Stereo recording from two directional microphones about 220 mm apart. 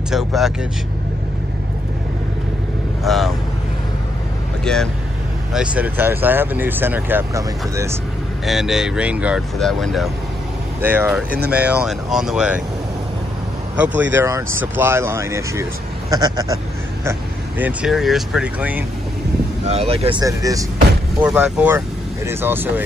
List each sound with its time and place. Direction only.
0.1 s speech: centre (ahead or behind)
3.0 s speech: centre (ahead or behind)
4.7 s speech: 5° left (ahead or behind); by 7.9 s 15° right (ahead or behind)
8.5 s speech: centre (ahead or behind)
11.2 s speech: 45° right (ahead or behind)
11.5 s speech: 5° right (ahead or behind)
13.7 s speech: 5° right (ahead or behind)
19.6 s speech: 30° right (ahead or behind)
21.2 s speech: 5° right (ahead or behind)